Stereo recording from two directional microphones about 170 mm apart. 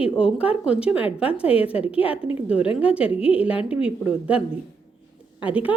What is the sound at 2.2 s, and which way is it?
Speech, 10° right (ahead or behind).